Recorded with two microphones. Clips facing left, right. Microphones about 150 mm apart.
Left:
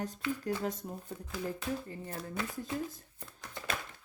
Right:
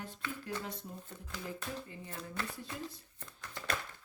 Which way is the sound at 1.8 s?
40° left (ahead or behind).